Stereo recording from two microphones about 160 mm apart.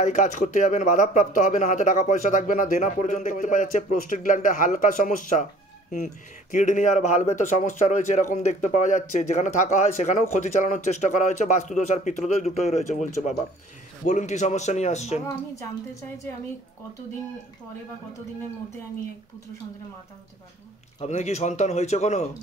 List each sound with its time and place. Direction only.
0.0 s speech: 50° left (ahead or behind)
15.2 s a woman's voice: 20° left (ahead or behind)
21.0 s speech: 45° left (ahead or behind)